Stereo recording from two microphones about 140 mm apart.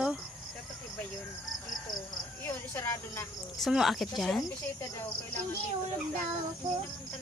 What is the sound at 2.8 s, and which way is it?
Speech, 20° left (ahead or behind).